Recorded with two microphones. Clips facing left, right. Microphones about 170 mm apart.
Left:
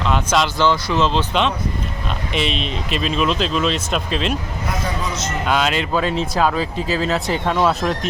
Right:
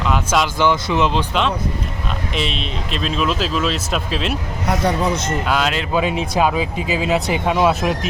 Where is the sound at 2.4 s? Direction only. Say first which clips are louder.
Left 3 dB; centre (ahead or behind).